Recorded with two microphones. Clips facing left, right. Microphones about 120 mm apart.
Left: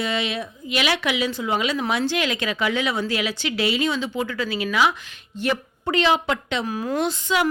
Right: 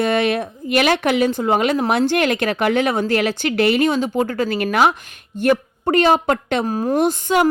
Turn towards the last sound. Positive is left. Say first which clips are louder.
# right 6 dB
turn(degrees=-45)  # may be behind; listen again after turning